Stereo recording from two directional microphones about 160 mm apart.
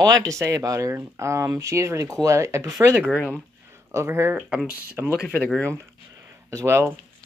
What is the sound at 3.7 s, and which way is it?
Speech, 15° right (ahead or behind).